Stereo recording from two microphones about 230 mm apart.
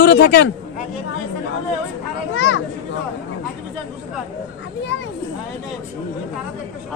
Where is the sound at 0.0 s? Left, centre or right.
Left.